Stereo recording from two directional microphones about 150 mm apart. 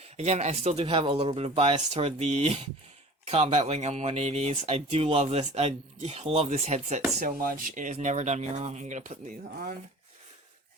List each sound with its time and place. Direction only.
0.0 s speech: 50° right (ahead or behind)
7.2 s speech: 65° right (ahead or behind)
7.9 s speech: 50° right (ahead or behind); by 9.7 s 65° right (ahead or behind)